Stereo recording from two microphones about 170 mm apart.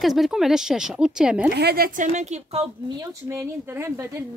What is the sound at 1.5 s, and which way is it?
A woman's voice, 70° right (ahead or behind).